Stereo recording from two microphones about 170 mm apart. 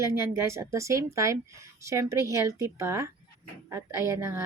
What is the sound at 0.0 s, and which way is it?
A woman's voice, 15° right (ahead or behind).